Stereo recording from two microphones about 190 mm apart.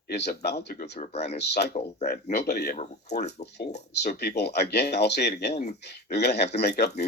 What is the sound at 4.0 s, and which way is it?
Speech, 60° left (ahead or behind).